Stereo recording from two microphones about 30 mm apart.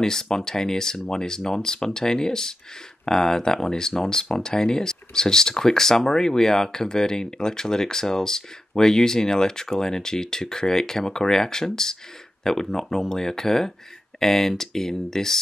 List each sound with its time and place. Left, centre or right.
0.0 s speech: centre